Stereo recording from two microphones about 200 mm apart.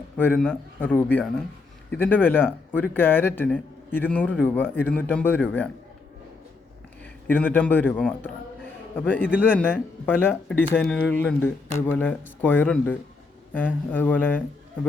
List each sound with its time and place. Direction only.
0.2 s speech: 10° left (ahead or behind)
7.0 s a man's voice: 10° left (ahead or behind)